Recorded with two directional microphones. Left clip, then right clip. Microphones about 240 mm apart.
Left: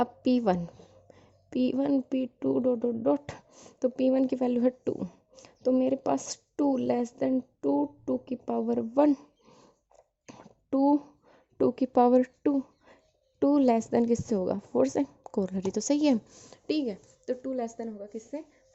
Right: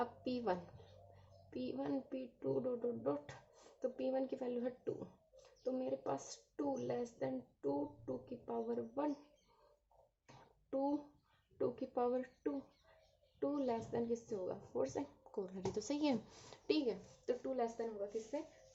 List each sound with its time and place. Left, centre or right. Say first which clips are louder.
0.0 s a woman's voice: left 14 dB; left
10.2 s a sound: left 13 dB; left
11.5 s a woman's voice: left 15 dB; left